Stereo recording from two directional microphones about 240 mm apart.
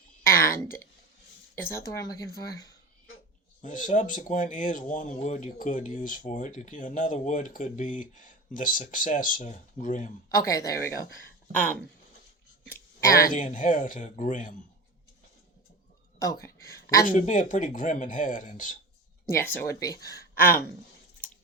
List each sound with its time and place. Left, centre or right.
0.3 s a sound: centre
1.7 s speech: centre
3.6 s speech: left
10.2 s speech: centre
13.2 s speech: left
16.1 s speech: centre
17.1 s speech: left
19.4 s speech: centre